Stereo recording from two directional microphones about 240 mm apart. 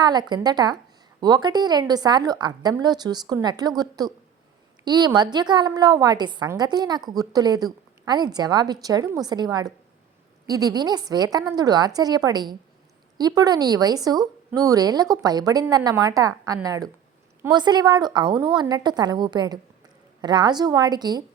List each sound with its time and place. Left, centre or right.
0.0 s a woman's voice: centre